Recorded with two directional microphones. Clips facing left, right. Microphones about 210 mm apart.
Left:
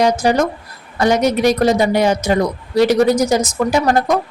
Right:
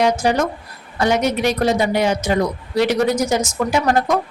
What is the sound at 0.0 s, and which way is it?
A woman's voice, 40° left (ahead or behind).